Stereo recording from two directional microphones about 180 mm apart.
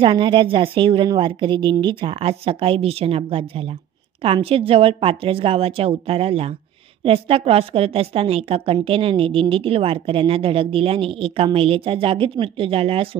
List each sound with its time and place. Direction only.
0.0 s a woman's voice: 25° right (ahead or behind)